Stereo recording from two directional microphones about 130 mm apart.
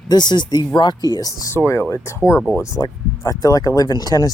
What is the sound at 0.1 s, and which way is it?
Speech, 35° left (ahead or behind).